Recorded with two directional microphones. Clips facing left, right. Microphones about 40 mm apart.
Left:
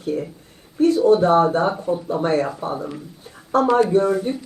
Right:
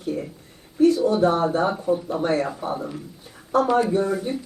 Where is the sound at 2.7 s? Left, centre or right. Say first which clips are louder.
Left 2 dB; centre.